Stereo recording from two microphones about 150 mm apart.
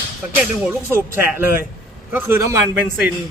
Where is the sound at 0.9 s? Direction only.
15° right (ahead or behind).